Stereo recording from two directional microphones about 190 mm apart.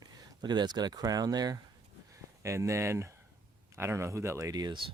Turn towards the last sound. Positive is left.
turn(degrees=-20)  # may be behind; listen again after turning